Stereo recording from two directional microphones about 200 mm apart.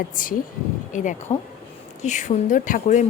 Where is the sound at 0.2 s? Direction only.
40° left (ahead or behind).